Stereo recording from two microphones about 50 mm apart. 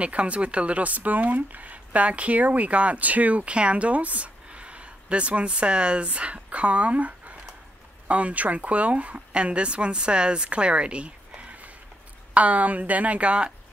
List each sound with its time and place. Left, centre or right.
0.0 s speech: right